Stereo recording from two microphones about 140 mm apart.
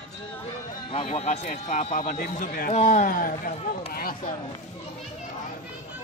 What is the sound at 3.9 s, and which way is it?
Speech, 90° left.